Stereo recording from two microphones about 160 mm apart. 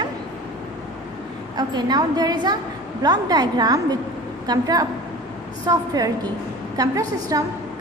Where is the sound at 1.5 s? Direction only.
25° right (ahead or behind).